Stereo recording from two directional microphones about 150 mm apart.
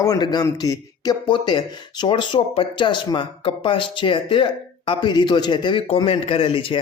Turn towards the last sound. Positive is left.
turn(degrees=35)  # may be behind; listen again after turning